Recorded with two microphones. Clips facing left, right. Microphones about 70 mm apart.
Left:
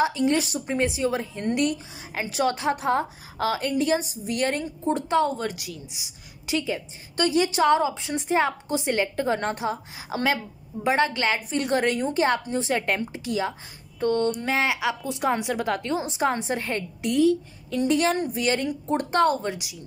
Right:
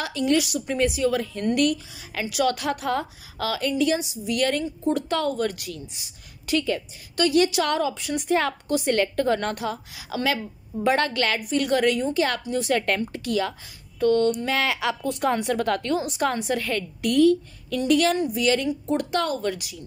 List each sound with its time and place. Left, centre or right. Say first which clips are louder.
0.0 s a woman's voice: left 1 dB; left
7.2 s a woman's voice: right 1 dB; left
10.8 s a woman's voice: right 1 dB; centre
13.9 s a woman's voice: right 3 dB; left
14.6 s a woman's voice: even; centre; by 19.5 s left
19.5 s a woman's voice: right 1 dB; centre